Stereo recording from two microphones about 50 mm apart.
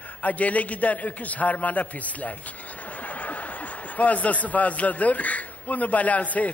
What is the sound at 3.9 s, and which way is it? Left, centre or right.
A man's voice, left.